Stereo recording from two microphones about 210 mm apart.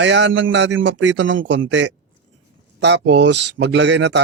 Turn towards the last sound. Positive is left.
turn(degrees=-55)  # may be behind; listen again after turning